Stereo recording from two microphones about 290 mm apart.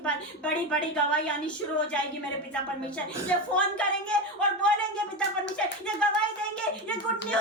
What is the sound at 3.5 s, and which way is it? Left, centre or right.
Speech, centre.